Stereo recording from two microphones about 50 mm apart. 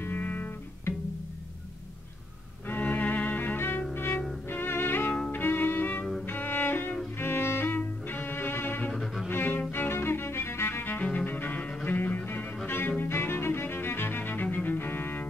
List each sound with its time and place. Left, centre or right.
0.0 s music: left
2.7 s music: left
5.3 s violin: left
6.2 s cello: left
7.2 s music: left
8.9 s cello: centre
9.3 s music: left